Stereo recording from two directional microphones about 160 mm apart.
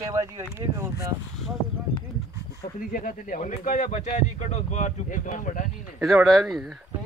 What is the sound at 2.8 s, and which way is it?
Speech, 60° left (ahead or behind).